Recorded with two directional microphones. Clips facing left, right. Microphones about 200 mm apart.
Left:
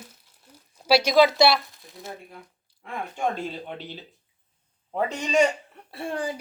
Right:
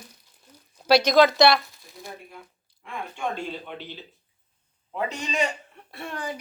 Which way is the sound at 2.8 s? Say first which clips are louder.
Left 3 dB; 40° left (ahead or behind).